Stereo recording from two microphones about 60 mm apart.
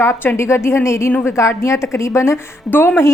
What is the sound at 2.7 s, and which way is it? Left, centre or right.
Speech, left.